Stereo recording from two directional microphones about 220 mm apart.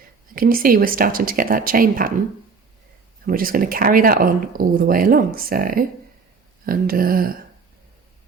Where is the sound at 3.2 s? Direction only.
40° right (ahead or behind).